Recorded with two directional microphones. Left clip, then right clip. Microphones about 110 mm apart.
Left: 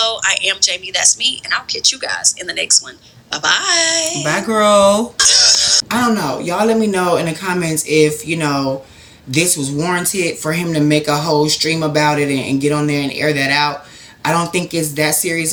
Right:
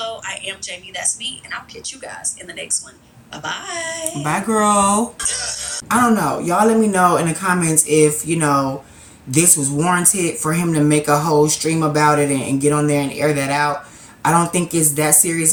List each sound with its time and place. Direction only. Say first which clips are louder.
0.0 s a woman's voice: left 10 dB; 20° left (ahead or behind)
4.5 s speech: left 5 dB; 45° right (ahead or behind)
5.1 s music: left 14 dB; 20° left (ahead or behind)
5.9 s speech: right 1 dB; 35° right (ahead or behind)